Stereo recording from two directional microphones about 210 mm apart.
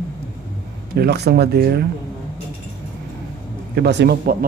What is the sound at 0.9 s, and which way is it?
Speech, 50° right (ahead or behind).